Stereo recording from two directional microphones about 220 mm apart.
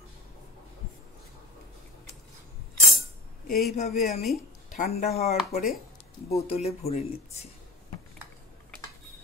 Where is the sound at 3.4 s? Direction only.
40° left (ahead or behind).